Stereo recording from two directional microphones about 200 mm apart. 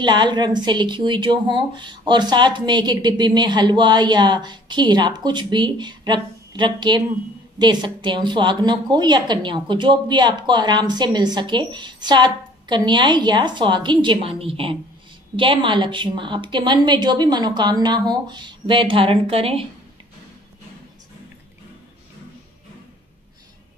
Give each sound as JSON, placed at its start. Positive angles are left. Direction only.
{"t": 0.0, "sound": "a woman's voice", "side_deg": -20}